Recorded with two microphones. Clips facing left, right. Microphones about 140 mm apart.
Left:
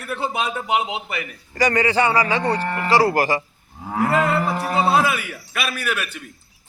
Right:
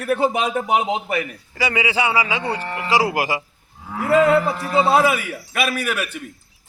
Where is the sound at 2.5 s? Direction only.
40° left (ahead or behind).